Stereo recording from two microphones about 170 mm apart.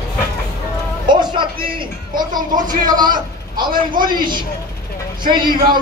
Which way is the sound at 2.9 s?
25° right (ahead or behind).